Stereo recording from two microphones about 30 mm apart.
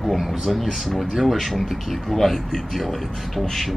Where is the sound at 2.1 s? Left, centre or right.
Centre.